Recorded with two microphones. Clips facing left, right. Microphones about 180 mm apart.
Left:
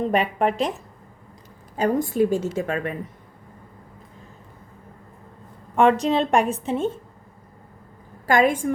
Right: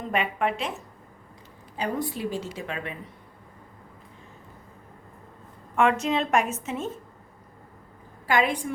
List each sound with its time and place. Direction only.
0.1 s speech: 35° left (ahead or behind)
1.7 s a woman's voice: 45° left (ahead or behind)
5.7 s speech: 35° left (ahead or behind)
8.3 s a woman's voice: 45° left (ahead or behind)